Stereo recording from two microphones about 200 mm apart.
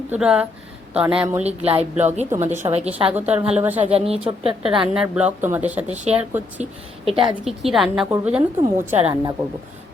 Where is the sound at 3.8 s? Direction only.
30° right (ahead or behind).